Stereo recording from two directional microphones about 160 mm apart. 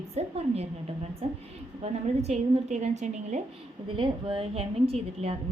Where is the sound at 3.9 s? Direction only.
30° right (ahead or behind).